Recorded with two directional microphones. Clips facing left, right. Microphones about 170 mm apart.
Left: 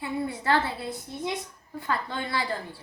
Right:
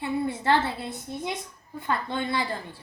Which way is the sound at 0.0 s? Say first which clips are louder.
Right 3 dB; 25° right (ahead or behind).